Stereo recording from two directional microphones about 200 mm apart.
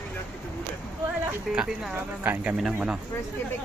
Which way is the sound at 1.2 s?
5° right (ahead or behind).